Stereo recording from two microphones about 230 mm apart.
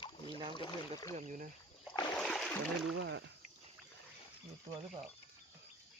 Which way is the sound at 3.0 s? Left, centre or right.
Right.